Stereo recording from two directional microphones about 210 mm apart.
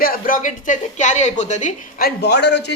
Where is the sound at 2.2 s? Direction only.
55° left (ahead or behind).